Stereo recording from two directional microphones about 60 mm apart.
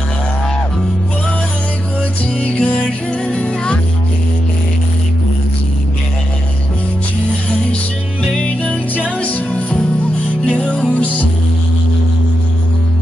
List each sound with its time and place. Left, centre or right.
2.4 s music: centre
8.4 s music: left